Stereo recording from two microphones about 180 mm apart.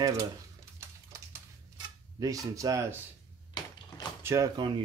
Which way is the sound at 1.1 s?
20° right (ahead or behind).